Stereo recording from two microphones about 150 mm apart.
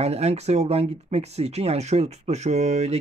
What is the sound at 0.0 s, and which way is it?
Speech, 45° right (ahead or behind).